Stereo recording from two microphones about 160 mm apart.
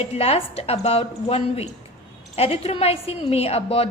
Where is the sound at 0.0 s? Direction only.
40° left (ahead or behind).